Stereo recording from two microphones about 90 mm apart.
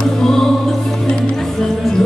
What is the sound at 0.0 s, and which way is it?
Music, 5° left (ahead or behind).